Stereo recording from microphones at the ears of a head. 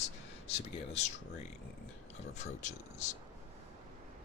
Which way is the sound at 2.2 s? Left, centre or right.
Left.